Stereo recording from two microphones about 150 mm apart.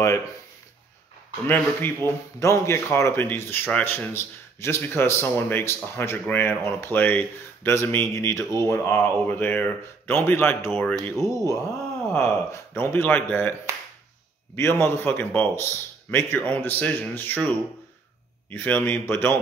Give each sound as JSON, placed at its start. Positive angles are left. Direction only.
{"t": 1.5, "sound": "speech", "side_deg": 15}
{"t": 11.1, "sound": "speech", "side_deg": 20}